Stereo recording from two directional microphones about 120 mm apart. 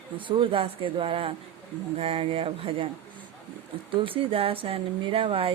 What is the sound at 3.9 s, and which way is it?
Speech, 50° right (ahead or behind).